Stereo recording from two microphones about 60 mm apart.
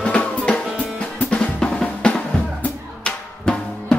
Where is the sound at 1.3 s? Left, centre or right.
Centre.